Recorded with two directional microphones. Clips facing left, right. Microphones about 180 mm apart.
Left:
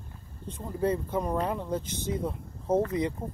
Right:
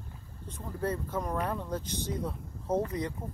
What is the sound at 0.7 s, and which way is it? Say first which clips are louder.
Speech: left 5 dB; 15° left (ahead or behind).